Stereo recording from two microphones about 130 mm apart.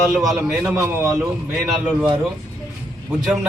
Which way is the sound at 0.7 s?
20° right (ahead or behind).